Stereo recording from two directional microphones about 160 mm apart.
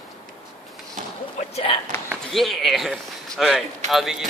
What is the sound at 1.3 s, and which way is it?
Speech, 40° left (ahead or behind).